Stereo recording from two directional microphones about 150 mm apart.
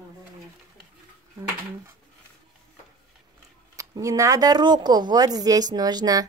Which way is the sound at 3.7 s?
20° right (ahead or behind).